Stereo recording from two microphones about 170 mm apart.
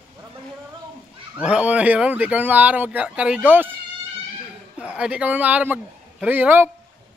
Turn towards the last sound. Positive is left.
turn(degrees=-10)  # may be behind; listen again after turning